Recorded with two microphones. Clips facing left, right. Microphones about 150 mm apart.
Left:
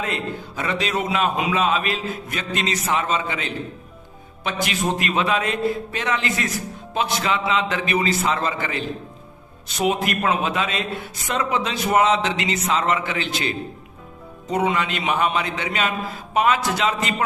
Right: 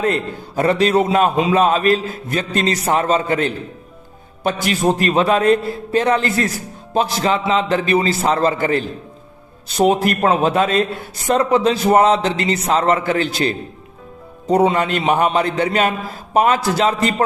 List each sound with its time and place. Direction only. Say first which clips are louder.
0.0 s speech: right 7 dB; 45° right (ahead or behind)